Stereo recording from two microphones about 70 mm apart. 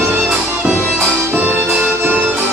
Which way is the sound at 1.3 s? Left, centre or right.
Right.